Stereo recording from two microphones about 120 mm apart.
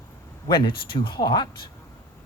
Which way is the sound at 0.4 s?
40° left (ahead or behind).